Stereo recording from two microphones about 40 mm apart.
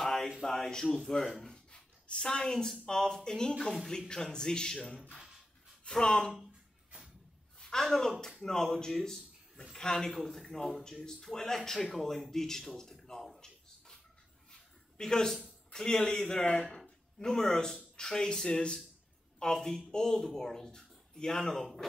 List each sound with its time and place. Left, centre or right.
0.0 s a sound: centre
0.4 s speech: centre
1.5 s writing: left
2.9 s speech: centre
7.5 s a woman's voice: centre
14.5 s a sound: centre
15.7 s a man's voice: centre
16.8 s a sound: centre
17.9 s speech: centre